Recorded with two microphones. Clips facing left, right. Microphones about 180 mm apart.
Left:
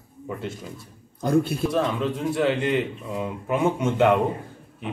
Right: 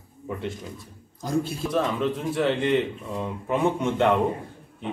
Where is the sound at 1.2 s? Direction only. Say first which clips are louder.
Left 5 dB; 60° left (ahead or behind).